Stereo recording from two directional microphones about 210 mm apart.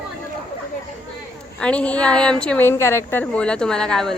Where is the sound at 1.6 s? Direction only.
5° left (ahead or behind).